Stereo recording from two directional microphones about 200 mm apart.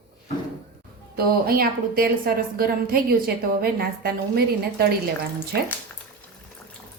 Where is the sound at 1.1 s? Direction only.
50° right (ahead or behind).